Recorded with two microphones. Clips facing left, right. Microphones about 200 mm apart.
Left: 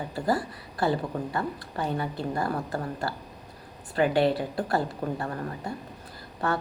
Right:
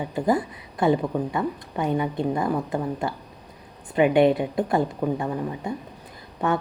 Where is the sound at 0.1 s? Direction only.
20° right (ahead or behind).